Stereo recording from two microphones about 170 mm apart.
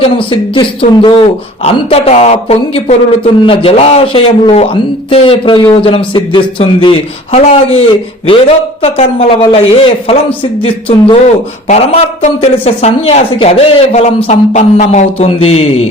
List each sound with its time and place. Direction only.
0.0 s speech: 30° left (ahead or behind)